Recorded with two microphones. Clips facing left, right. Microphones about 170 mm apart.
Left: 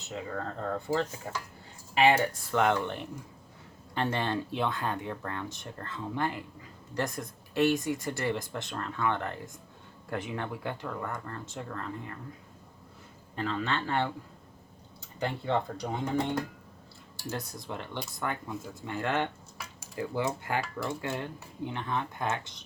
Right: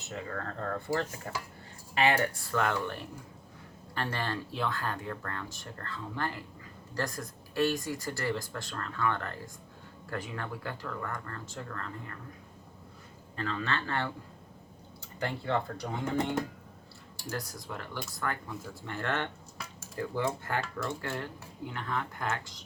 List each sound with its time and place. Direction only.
0.1 s speech: 15° left (ahead or behind)
2.0 s speech: 15° left (ahead or behind)
13.3 s speech: 15° left (ahead or behind)
15.2 s speech: 20° left (ahead or behind)
17.2 s speech: 25° left (ahead or behind)